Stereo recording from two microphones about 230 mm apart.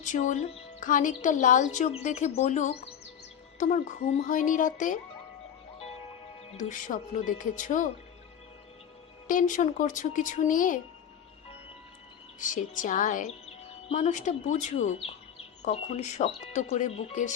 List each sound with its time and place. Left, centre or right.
0.0 s a woman's voice: left
6.5 s a woman's voice: left
9.2 s a woman's voice: left
12.4 s a woman's voice: left